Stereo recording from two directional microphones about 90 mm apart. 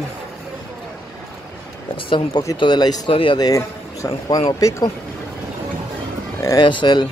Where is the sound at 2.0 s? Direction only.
65° left (ahead or behind).